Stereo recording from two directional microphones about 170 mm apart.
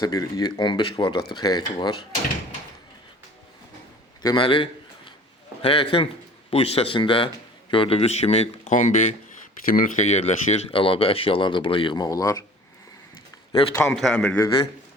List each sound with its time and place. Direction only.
0.0 s speech: 20° left (ahead or behind)
4.2 s a sound: 25° left (ahead or behind)
5.6 s speech: 30° left (ahead or behind)
13.7 s a man's voice: 10° left (ahead or behind)